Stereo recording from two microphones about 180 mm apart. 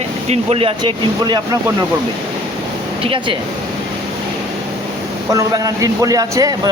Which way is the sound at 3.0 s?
30° right (ahead or behind).